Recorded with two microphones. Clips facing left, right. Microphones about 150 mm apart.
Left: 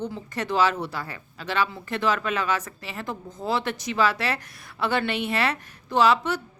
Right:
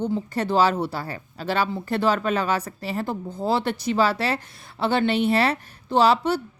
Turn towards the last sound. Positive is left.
turn(degrees=-30)  # may be behind; listen again after turning